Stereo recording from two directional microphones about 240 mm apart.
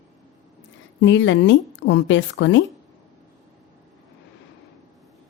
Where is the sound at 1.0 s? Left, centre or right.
Left.